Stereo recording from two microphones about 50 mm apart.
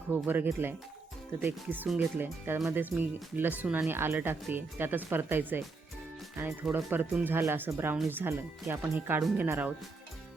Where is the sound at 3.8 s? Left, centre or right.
Right.